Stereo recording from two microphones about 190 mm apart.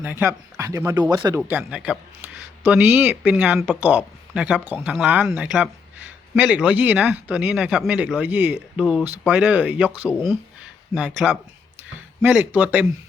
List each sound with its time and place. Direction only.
0.0 s speech: 10° right (ahead or behind)
8.8 s speech: 5° left (ahead or behind)
9.0 s speech: 10° right (ahead or behind)